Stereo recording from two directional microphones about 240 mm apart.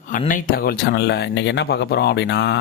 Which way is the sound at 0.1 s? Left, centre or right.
Left.